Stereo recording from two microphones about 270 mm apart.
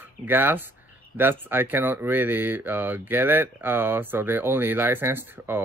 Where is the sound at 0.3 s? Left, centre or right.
Centre.